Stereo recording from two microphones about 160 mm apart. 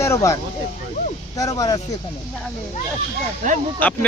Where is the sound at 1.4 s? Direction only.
20° left (ahead or behind).